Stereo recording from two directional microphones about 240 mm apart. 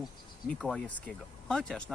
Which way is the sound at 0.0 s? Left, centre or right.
Centre.